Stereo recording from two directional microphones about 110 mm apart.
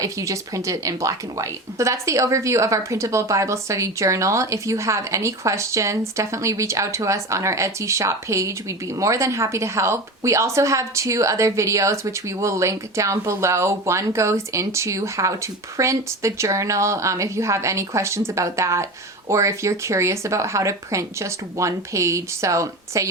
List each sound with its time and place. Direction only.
0.0 s speech: 30° right (ahead or behind)